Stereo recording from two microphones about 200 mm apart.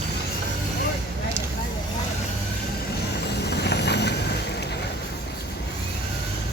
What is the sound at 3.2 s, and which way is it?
Vehicle, 55° left (ahead or behind).